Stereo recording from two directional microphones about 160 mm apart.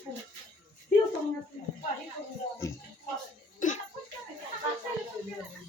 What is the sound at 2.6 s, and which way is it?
Speech, 20° left (ahead or behind).